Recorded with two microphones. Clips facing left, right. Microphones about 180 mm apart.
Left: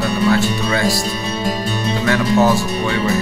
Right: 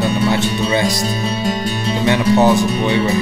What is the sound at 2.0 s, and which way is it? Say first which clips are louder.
Speech: right 2 dB; 20° right (ahead or behind).